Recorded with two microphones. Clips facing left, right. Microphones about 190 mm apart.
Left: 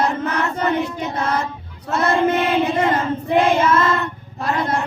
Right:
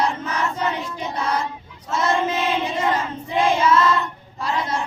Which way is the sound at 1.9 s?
60° left (ahead or behind).